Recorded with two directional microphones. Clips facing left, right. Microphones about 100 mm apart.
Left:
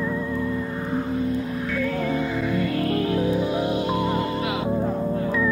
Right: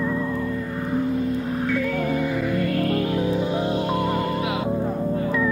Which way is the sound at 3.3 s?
30° right (ahead or behind).